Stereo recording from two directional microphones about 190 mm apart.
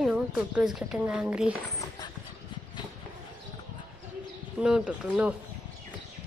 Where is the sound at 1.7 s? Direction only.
20° left (ahead or behind).